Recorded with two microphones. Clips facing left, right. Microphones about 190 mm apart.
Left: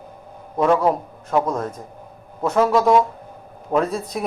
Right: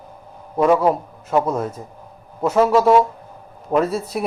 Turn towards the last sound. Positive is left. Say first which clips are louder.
# right 2 dB
turn(degrees=-5)  # may be behind; listen again after turning